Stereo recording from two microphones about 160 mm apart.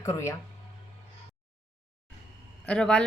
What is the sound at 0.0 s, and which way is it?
Speech, 20° left (ahead or behind).